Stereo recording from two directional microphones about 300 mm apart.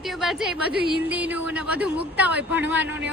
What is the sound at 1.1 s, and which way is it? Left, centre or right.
Speech, centre.